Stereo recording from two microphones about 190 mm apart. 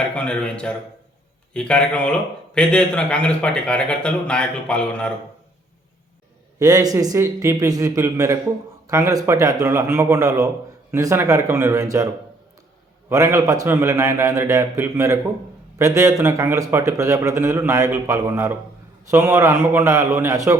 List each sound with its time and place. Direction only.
0.0 s speech: 5° left (ahead or behind)
6.6 s a man's voice: 20° right (ahead or behind)
13.1 s a man's voice: 15° right (ahead or behind)